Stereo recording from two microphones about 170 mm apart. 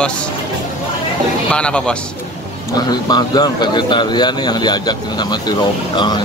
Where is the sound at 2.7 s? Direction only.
25° left (ahead or behind).